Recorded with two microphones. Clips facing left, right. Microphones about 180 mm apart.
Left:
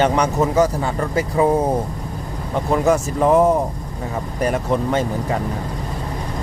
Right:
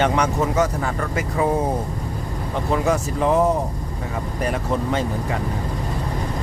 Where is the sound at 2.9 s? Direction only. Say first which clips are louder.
Left 5 dB; 50° left (ahead or behind).